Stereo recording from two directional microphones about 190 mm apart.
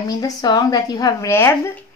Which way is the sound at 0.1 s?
20° left (ahead or behind).